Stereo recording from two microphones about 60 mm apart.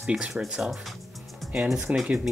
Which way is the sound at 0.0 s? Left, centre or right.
Centre.